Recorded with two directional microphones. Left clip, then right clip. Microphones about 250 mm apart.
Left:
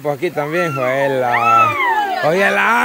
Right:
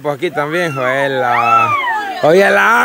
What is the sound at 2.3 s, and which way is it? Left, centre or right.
Speech, right.